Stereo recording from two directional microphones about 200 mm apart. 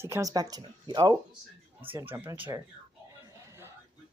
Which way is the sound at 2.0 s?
10° right (ahead or behind).